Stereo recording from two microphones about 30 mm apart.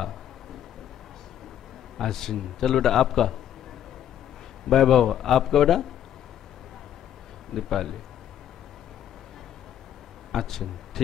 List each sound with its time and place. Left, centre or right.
2.0 s a man's voice: centre
4.6 s a man's voice: centre
7.5 s a man's voice: centre
10.3 s a man's voice: centre